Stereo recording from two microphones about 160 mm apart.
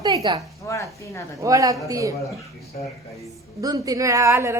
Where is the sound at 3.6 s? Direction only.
20° right (ahead or behind).